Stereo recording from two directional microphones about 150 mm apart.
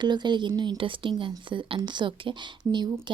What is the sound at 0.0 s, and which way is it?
Speech, 30° right (ahead or behind).